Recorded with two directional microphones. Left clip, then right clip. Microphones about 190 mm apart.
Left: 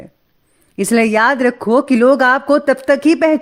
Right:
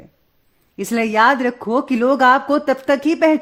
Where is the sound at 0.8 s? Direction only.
25° left (ahead or behind).